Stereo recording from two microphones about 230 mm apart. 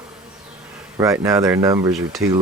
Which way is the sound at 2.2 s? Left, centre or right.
Right.